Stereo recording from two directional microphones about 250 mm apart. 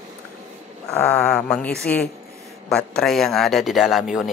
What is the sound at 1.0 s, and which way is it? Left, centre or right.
Speech, centre.